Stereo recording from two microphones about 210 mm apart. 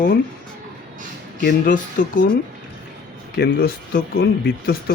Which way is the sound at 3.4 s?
45° left (ahead or behind).